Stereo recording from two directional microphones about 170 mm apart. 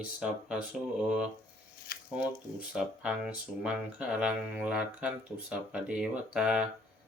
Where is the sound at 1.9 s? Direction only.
65° left (ahead or behind).